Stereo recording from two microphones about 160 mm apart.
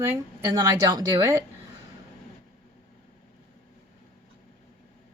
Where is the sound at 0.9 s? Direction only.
20° right (ahead or behind).